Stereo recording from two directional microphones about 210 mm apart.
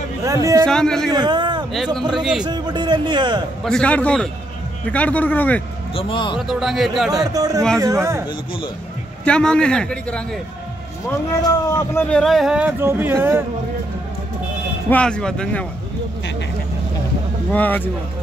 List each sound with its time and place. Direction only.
0.2 s speech: 15° right (ahead or behind)
0.7 s speech: 5° left (ahead or behind)
1.1 s a sound: 20° right (ahead or behind)
2.1 s speech: centre (ahead or behind)
2.4 s speech: 20° right (ahead or behind)
3.6 s a man's voice: 5° left (ahead or behind)
5.9 s speech: 25° left (ahead or behind)
6.3 s speech: centre (ahead or behind)
7.3 s speech: 15° right (ahead or behind)
9.2 s speech: 5° left (ahead or behind)
14.9 s speech: 5° left (ahead or behind)
17.5 s a man's voice: 10° left (ahead or behind)